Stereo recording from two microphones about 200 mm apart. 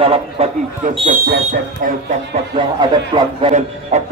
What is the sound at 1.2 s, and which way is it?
Speech, 55° right (ahead or behind).